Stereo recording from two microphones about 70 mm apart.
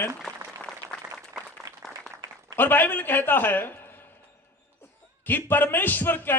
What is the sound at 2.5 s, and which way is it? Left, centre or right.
A man's voice, left.